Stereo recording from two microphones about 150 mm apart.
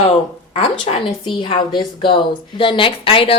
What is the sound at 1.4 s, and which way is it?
Speech, 35° left (ahead or behind).